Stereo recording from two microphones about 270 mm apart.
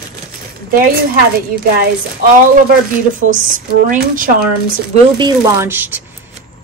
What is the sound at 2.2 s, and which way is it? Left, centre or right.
A woman's voice, right.